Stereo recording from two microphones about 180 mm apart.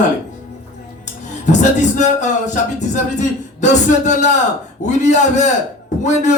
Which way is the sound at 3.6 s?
40° left (ahead or behind).